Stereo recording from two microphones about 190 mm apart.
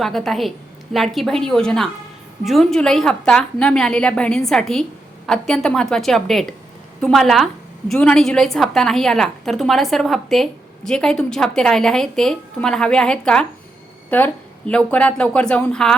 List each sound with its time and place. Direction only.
0.0 s a woman's voice: centre (ahead or behind)